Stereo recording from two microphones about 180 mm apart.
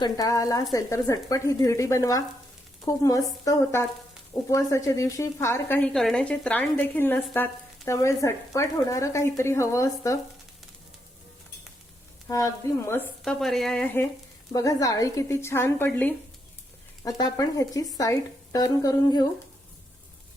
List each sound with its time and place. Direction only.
0.0 s a woman's voice: 20° left (ahead or behind)
12.3 s speech: 15° left (ahead or behind)
17.0 s a woman's voice: 20° left (ahead or behind)